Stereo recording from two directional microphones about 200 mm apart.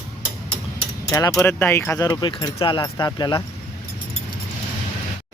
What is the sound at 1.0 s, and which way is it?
Speech, 15° left (ahead or behind).